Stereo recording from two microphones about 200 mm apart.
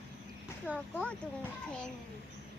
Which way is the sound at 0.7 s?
5° right (ahead or behind).